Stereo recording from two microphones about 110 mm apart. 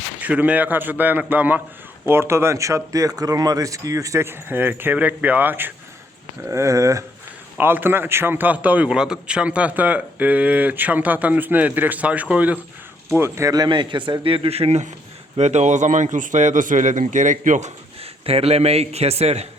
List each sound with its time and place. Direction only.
0.2 s a man's voice: 15° right (ahead or behind)
6.5 s speech: 30° right (ahead or behind)
7.6 s a man's voice: 20° right (ahead or behind)
13.1 s a man's voice: 25° right (ahead or behind); by 16.9 s 90° right
17.6 s a man's voice: 65° right (ahead or behind)